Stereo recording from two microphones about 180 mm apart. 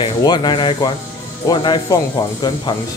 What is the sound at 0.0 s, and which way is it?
Speech, 25° left (ahead or behind).